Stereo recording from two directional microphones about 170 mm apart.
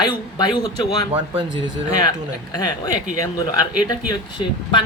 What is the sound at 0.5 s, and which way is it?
Speech, 25° left (ahead or behind).